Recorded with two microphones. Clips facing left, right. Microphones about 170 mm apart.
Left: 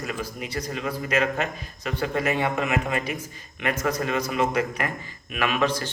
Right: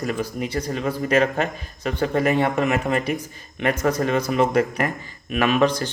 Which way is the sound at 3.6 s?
30° right (ahead or behind).